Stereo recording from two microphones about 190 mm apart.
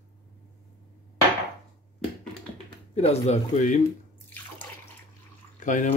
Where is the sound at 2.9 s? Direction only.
30° left (ahead or behind).